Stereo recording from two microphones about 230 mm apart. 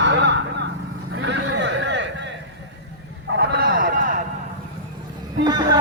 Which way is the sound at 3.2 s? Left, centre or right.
Right.